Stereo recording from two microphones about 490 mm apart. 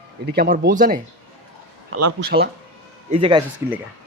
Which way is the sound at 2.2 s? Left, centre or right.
Centre.